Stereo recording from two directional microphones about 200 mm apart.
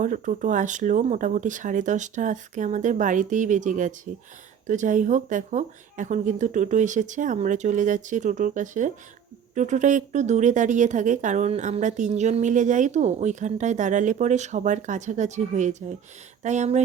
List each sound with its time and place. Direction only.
0.0 s speech: 40° right (ahead or behind)